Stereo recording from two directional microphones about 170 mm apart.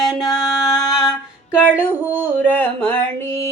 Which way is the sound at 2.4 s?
10° left (ahead or behind).